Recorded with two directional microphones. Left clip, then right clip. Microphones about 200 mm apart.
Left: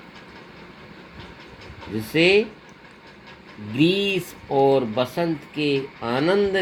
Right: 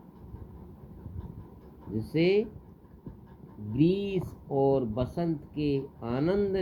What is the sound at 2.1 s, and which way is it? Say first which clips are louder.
Speech: left 9 dB; 20° left (ahead or behind).